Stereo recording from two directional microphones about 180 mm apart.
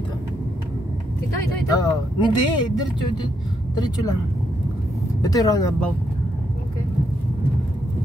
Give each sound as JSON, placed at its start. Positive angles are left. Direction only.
{"t": 1.7, "sound": "speech", "side_deg": 25}
{"t": 5.2, "sound": "speech", "side_deg": 20}